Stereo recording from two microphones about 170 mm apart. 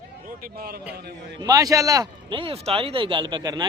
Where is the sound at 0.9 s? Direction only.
75° right (ahead or behind).